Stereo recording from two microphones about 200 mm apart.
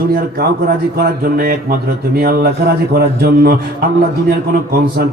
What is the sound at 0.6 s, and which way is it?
Speech, 50° right (ahead or behind).